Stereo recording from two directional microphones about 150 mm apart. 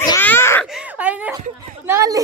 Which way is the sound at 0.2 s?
15° left (ahead or behind).